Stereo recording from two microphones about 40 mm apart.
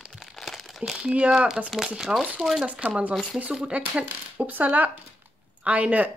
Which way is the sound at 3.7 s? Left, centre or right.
Right.